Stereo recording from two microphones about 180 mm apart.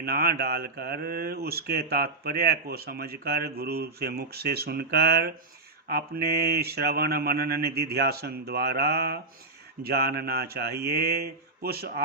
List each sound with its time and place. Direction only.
0.0 s speech: 55° right (ahead or behind)